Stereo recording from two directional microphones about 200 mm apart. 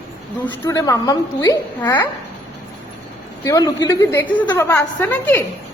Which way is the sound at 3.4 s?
15° left (ahead or behind).